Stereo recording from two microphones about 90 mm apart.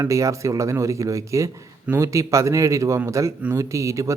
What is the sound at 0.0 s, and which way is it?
A man's voice, 35° right (ahead or behind).